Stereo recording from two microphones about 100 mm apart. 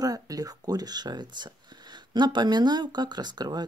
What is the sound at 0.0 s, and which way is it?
Speech, 40° right (ahead or behind).